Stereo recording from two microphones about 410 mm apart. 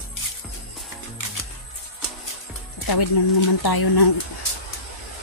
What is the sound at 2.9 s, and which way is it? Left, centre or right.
Speech, left.